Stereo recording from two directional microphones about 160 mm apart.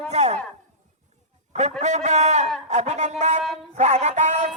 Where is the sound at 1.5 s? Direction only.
45° right (ahead or behind).